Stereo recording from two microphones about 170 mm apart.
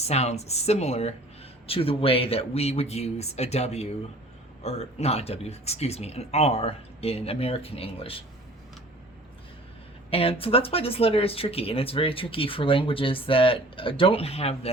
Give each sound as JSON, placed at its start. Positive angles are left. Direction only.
{"t": 0.0, "sound": "speech", "side_deg": 40}
{"t": 10.1, "sound": "speech", "side_deg": 35}